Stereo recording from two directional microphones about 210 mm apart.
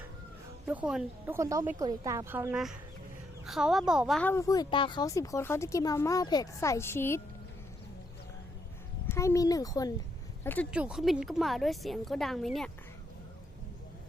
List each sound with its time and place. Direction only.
0.7 s a woman's voice: 5° right (ahead or behind)
1.4 s a woman's voice: 15° right (ahead or behind); by 7.2 s 10° left (ahead or behind)
9.0 s a woman's voice: 15° left (ahead or behind)
10.7 s a woman's voice: 5° right (ahead or behind)